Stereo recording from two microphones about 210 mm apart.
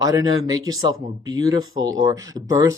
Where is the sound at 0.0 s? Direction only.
15° right (ahead or behind).